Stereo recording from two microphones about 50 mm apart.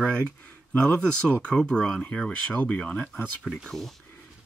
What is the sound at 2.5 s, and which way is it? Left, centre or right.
Speech, left.